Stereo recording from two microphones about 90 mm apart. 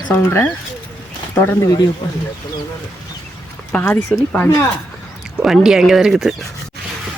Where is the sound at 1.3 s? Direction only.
30° left (ahead or behind).